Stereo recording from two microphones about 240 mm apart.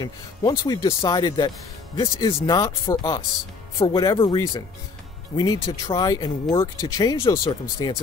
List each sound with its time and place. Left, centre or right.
0.0 s speech: centre